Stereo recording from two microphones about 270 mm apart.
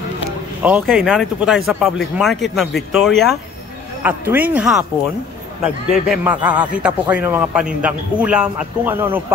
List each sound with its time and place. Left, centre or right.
0.6 s a man's voice: centre
6.0 s a man's voice: centre